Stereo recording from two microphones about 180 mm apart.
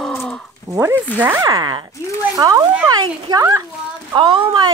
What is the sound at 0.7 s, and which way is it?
Speech, 15° right (ahead or behind).